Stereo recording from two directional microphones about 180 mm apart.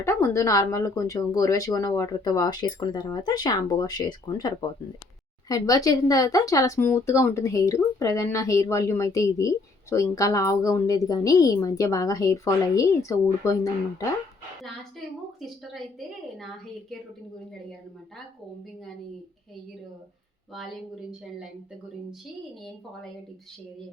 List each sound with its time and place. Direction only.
0.0 s speech: 15° left (ahead or behind)
14.6 s a woman's voice: centre (ahead or behind)
20.5 s a woman's voice: centre (ahead or behind)